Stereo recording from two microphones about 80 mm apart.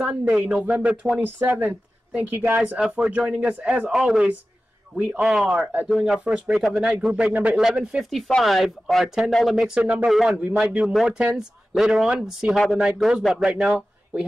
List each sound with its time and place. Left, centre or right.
0.3 s a woman's voice: centre
2.8 s speech: centre
3.9 s speech: centre
4.9 s speech: centre
5.3 s speech: centre
5.9 s speech: centre
8.3 s speech: centre
9.8 s speech: centre
10.0 s speech: centre
12.5 s speech: centre
12.8 s speech: centre